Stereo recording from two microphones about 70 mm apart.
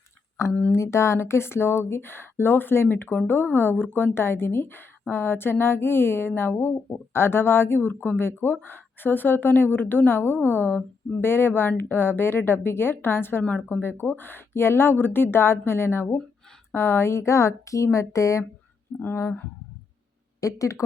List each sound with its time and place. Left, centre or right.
0.7 s a woman's voice: left
18.9 s a woman's voice: left
20.4 s a woman's voice: left